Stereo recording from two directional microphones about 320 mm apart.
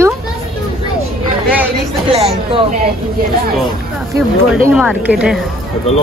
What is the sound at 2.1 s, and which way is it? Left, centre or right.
Speech, centre.